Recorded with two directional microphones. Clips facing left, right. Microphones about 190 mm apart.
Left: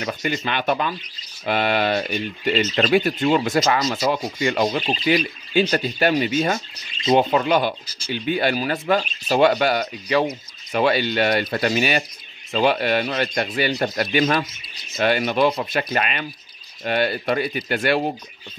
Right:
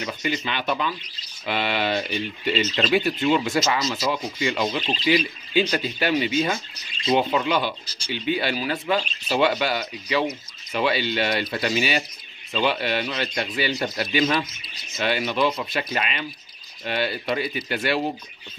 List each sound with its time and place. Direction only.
0.0 s speech: 45° left (ahead or behind)